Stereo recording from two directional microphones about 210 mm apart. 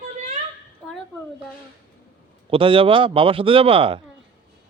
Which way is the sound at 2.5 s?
25° right (ahead or behind).